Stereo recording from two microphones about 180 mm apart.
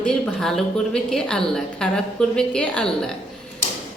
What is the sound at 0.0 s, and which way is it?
Speech, 5° left (ahead or behind).